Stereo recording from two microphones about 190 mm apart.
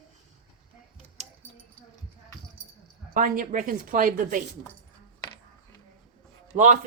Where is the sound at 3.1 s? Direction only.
45° right (ahead or behind).